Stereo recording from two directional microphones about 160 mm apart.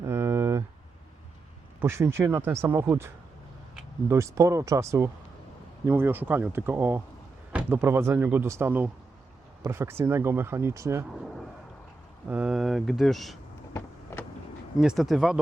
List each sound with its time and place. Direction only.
0.0 s a sound: 15° right (ahead or behind)
1.8 s speech: 15° right (ahead or behind)
4.1 s speech: 20° right (ahead or behind)
12.3 s speech: 5° right (ahead or behind)
14.8 s speech: centre (ahead or behind)